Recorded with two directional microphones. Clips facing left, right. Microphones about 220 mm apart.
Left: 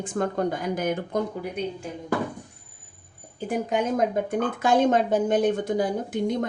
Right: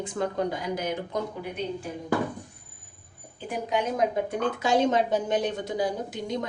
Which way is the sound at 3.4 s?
45° left (ahead or behind).